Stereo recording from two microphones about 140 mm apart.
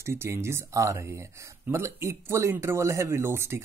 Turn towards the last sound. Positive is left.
turn(degrees=-20)  # may be behind; listen again after turning